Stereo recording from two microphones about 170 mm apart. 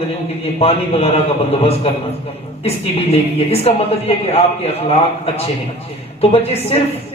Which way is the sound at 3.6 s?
35° left (ahead or behind).